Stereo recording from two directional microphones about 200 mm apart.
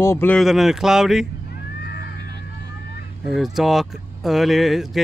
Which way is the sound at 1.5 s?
55° left (ahead or behind).